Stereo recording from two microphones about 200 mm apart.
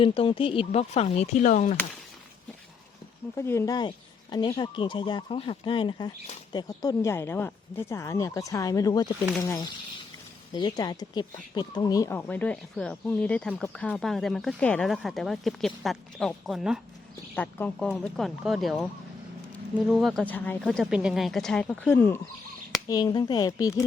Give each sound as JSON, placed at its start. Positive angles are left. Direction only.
{"t": 0.0, "sound": "speech", "side_deg": 25}
{"t": 3.3, "sound": "speech", "side_deg": 10}
{"t": 17.3, "sound": "speech", "side_deg": 10}
{"t": 19.9, "sound": "speech", "side_deg": 0}